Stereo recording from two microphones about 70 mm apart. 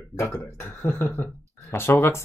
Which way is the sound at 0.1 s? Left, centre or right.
Left.